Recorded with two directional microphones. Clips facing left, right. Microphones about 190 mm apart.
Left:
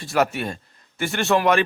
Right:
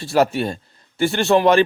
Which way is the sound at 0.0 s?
30° right (ahead or behind).